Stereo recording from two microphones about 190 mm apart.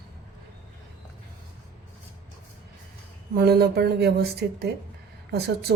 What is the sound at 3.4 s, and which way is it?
A woman's voice, 55° right (ahead or behind).